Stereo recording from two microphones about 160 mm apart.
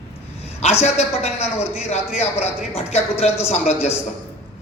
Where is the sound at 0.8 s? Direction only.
40° left (ahead or behind).